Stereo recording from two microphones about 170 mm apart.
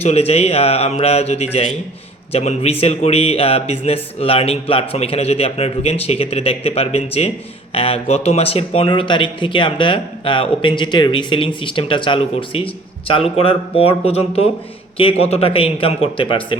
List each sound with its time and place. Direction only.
0.0 s speech: 40° left (ahead or behind)